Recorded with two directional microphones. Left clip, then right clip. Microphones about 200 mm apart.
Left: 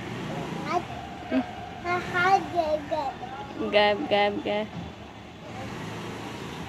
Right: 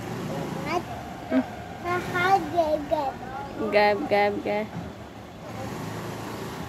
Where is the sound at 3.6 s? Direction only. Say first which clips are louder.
Right 1 dB; 10° left (ahead or behind).